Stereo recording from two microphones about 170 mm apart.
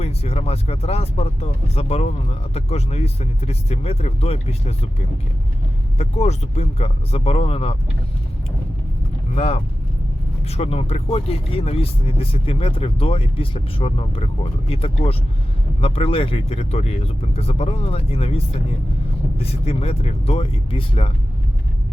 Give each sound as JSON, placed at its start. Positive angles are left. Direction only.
{"t": 0.0, "sound": "speech", "side_deg": 35}
{"t": 9.3, "sound": "speech", "side_deg": 35}